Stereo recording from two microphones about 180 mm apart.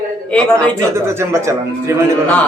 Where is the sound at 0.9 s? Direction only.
15° right (ahead or behind).